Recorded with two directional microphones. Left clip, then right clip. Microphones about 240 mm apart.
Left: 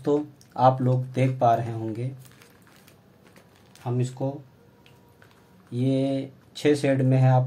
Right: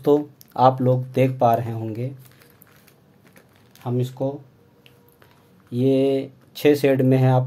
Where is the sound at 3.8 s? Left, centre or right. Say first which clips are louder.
Right 4 dB; right.